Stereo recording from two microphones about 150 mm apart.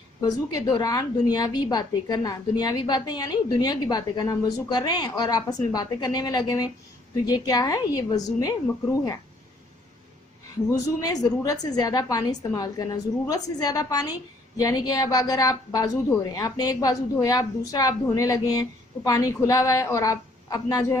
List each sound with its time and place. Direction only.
0.2 s a woman's voice: 25° left (ahead or behind)
10.7 s a woman's voice: 25° left (ahead or behind)